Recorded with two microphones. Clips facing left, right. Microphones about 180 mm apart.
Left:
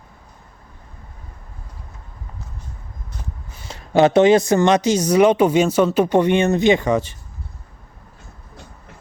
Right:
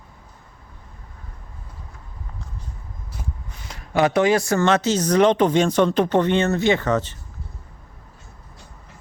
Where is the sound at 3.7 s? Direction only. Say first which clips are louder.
Left 5 dB; 25° left (ahead or behind).